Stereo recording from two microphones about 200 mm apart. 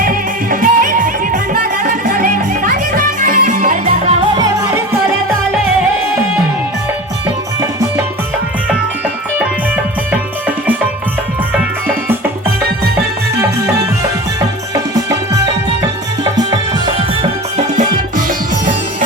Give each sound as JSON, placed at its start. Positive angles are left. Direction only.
{"t": 0.0, "sound": "music", "side_deg": -45}
{"t": 4.4, "sound": "music", "side_deg": -20}
{"t": 16.3, "sound": "music", "side_deg": -20}